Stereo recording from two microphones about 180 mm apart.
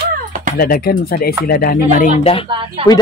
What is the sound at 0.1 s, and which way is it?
Music, 50° right (ahead or behind).